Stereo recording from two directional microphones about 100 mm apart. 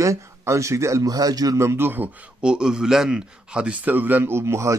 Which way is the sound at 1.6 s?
25° right (ahead or behind).